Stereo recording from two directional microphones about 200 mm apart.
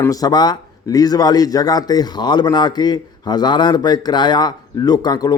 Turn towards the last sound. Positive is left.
turn(degrees=20)  # may be behind; listen again after turning